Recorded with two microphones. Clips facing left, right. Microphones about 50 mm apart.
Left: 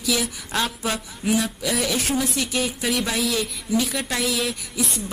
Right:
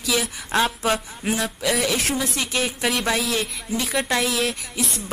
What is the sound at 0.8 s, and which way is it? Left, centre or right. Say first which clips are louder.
Speech: right 3 dB; right.